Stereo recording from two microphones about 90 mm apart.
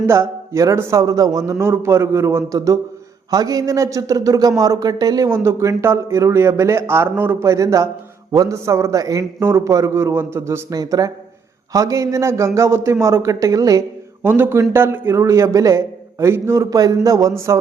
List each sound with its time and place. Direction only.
0.1 s a man's voice: 30° right (ahead or behind)
5.3 s a man's voice: 30° right (ahead or behind)
9.4 s speech: 30° right (ahead or behind)
10.7 s a man's voice: 45° right (ahead or behind)
14.3 s a man's voice: 25° right (ahead or behind)
16.6 s a man's voice: 40° right (ahead or behind)